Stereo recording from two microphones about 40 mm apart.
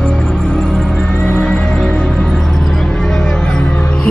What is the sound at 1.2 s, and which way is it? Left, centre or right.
Music, left.